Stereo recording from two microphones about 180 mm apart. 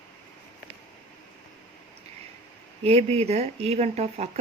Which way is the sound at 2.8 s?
35° right (ahead or behind).